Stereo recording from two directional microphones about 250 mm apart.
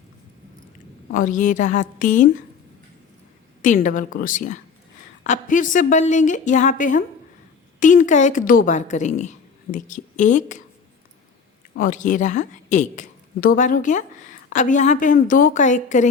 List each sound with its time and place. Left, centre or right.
1.1 s a woman's voice: left
3.6 s a woman's voice: left
11.7 s a woman's voice: left